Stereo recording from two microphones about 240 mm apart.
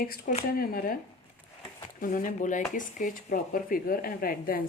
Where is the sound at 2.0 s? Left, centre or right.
Left.